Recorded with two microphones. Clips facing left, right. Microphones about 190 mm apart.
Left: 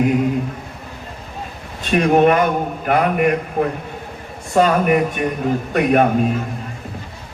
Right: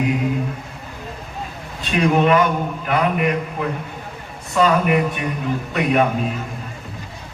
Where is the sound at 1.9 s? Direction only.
50° left (ahead or behind).